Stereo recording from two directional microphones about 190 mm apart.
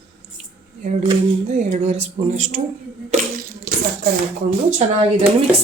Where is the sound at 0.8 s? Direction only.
35° right (ahead or behind).